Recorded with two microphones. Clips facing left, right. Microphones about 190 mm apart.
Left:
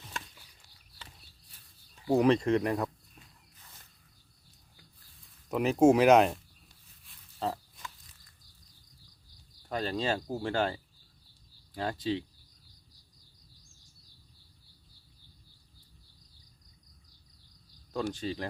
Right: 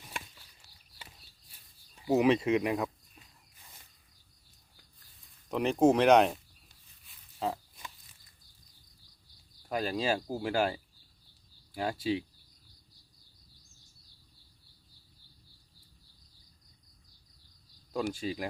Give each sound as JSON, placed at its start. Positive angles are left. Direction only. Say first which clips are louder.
{"t": 2.0, "sound": "walk", "louder": "left 1 dB", "side_deg": -5}
{"t": 5.5, "sound": "speech", "louder": "left 2 dB", "side_deg": 5}
{"t": 7.0, "sound": "a sound", "louder": "even", "side_deg": 0}
{"t": 9.6, "sound": "speech", "louder": "right 1 dB", "side_deg": -10}
{"t": 17.9, "sound": "speech", "louder": "even", "side_deg": -10}